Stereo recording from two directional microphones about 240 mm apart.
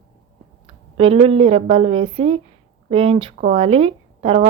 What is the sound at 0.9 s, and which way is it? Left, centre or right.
A woman's voice, right.